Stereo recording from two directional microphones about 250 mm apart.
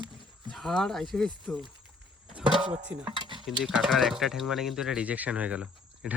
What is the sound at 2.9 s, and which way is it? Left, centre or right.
Stir, centre.